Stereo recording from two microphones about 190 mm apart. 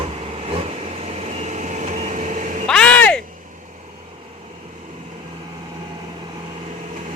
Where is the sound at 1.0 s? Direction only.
35° right (ahead or behind).